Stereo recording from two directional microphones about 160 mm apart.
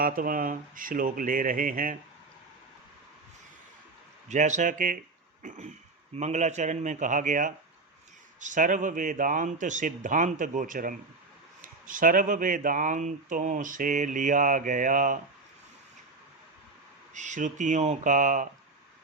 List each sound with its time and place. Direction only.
0.0 s speech: 60° right (ahead or behind)
4.3 s a man's voice: 50° right (ahead or behind)
17.2 s a man's voice: 50° right (ahead or behind)